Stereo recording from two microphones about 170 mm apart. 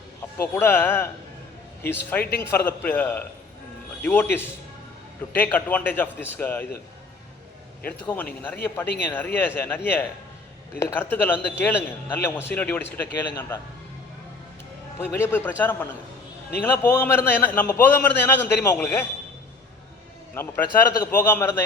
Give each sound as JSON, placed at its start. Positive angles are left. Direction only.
{"t": 0.3, "sound": "a man's voice", "side_deg": 15}
{"t": 7.9, "sound": "a man's voice", "side_deg": 10}
{"t": 14.9, "sound": "a man's voice", "side_deg": 15}
{"t": 21.0, "sound": "a man's voice", "side_deg": 15}